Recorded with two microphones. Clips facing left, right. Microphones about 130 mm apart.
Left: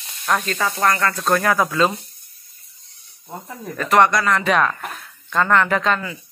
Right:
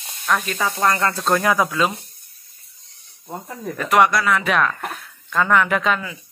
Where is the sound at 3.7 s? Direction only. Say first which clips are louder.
Left 1 dB; 10° right (ahead or behind).